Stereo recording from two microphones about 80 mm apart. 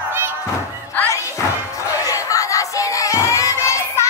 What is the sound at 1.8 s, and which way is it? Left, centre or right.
Music, left.